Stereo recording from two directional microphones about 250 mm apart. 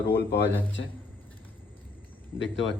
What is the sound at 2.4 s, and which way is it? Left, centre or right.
Speech, left.